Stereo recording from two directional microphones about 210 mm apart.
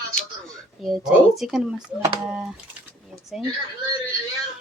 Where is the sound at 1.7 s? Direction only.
20° right (ahead or behind).